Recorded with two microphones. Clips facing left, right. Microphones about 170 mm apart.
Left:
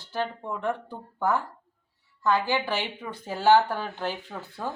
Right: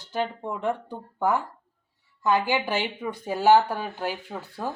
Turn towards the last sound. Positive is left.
turn(degrees=-10)  # may be behind; listen again after turning